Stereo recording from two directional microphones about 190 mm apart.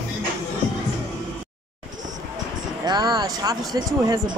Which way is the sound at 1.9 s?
40° right (ahead or behind).